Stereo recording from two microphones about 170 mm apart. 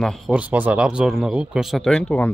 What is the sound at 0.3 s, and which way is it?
Speech, 10° right (ahead or behind).